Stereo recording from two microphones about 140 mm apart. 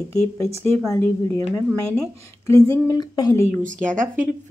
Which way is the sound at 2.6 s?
20° left (ahead or behind).